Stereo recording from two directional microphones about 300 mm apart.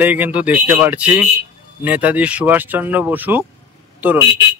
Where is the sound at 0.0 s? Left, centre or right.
Centre.